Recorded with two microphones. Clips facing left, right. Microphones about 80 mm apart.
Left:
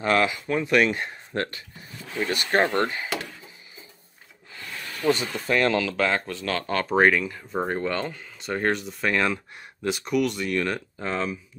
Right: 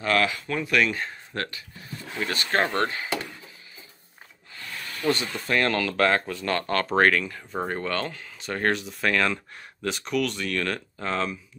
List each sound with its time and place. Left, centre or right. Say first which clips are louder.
0.0 s speech: left 2 dB; left
2.1 s speech: left 2 dB; centre
5.0 s speech: left 2 dB; centre
5.9 s speech: right 2 dB; centre
6.9 s speech: left 2 dB; centre
9.1 s speech: left 1 dB; centre